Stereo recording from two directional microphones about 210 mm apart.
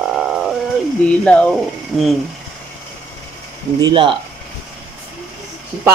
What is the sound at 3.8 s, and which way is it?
Speech, 25° right (ahead or behind).